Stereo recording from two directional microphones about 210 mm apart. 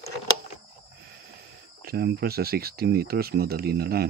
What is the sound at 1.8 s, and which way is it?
Speech, 50° right (ahead or behind).